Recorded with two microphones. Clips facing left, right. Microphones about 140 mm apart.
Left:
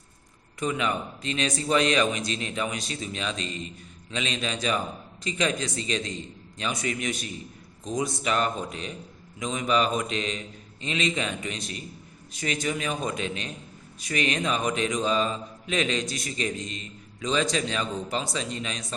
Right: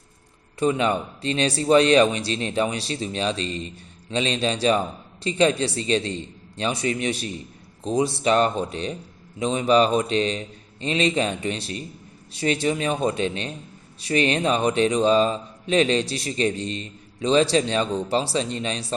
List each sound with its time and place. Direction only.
0.6 s a man's voice: 30° right (ahead or behind)